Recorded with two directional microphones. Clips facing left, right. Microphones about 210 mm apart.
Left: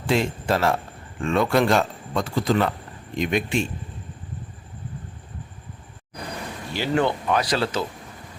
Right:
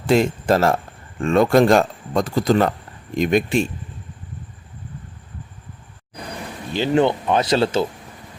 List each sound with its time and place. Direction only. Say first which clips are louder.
0.1 s speech: right 6 dB; 45° right (ahead or behind)
6.7 s speech: right 5 dB; 20° right (ahead or behind)